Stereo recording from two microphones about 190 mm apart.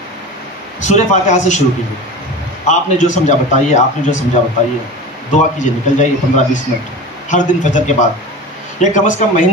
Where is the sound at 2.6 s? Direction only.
40° left (ahead or behind).